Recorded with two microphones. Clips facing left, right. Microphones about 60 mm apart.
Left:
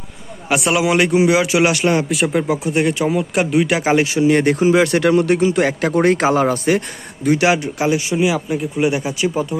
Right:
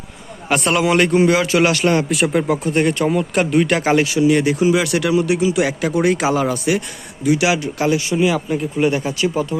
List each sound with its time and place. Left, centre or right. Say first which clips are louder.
0.4 s a man's voice: even; centre
2.1 s speech: even; centre
3.9 s speech: left 1 dB; left
5.1 s speech: left 2 dB; left
7.8 s speech: even; left
8.1 s a man's voice: even; centre